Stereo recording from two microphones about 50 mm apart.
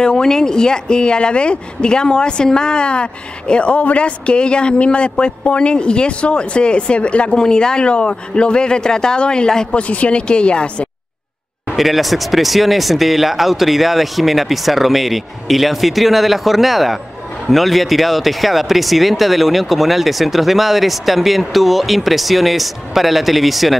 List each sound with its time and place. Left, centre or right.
0.0 s speech: centre
9.8 s speech: left
11.7 s speech: centre